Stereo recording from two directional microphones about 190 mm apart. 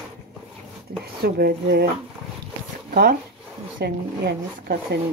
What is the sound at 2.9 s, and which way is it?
Speech, 50° right (ahead or behind).